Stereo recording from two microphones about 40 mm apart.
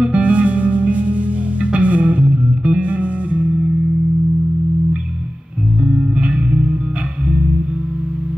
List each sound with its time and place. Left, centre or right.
0.0 s music: right
5.9 s music: right